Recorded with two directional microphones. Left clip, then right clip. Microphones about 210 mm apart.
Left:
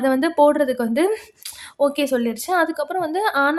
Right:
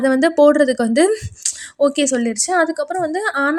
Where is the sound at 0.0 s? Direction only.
10° right (ahead or behind).